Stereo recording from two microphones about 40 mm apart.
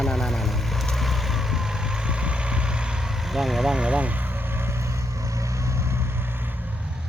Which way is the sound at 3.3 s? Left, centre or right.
Centre.